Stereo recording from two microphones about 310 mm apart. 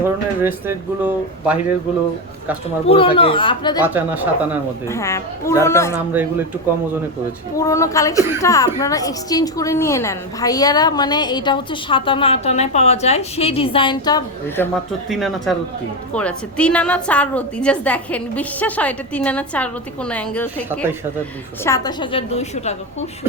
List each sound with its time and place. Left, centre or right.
0.0 s speech: centre
2.8 s a woman's voice: centre
3.8 s a woman's voice: centre
4.9 s a woman's voice: centre
7.5 s a woman's voice: centre